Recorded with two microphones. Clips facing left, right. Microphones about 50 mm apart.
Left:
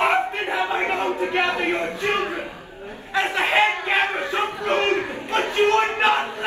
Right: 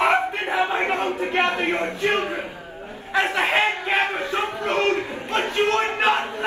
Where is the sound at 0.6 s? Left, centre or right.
Right.